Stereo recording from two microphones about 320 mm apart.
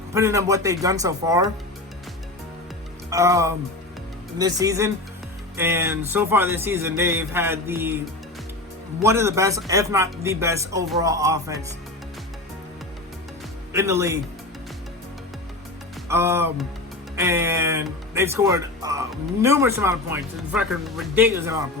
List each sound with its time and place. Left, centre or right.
0.1 s speech: centre
3.1 s speech: centre
9.0 s speech: centre
13.7 s speech: centre
16.0 s speech: centre